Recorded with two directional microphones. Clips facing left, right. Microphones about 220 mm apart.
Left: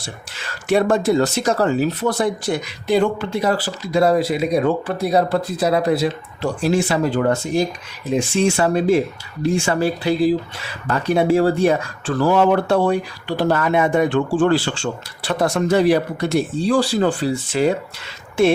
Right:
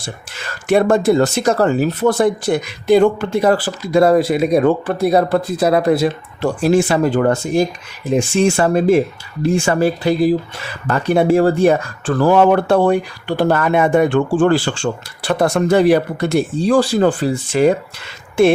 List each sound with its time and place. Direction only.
0.7 s speech: 50° right (ahead or behind)